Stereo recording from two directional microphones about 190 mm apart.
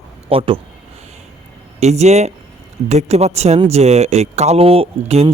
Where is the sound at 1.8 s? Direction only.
35° right (ahead or behind).